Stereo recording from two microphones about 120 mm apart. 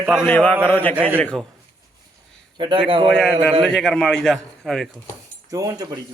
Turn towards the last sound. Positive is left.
turn(degrees=-30)  # may be behind; listen again after turning